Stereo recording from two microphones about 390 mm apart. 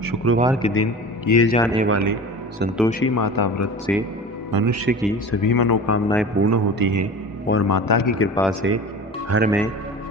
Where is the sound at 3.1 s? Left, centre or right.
Left.